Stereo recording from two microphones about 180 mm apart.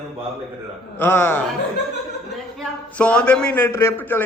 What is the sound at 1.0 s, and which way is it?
Speech, 10° left (ahead or behind).